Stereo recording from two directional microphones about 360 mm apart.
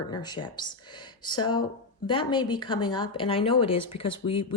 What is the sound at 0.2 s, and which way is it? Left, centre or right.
A woman's voice, centre.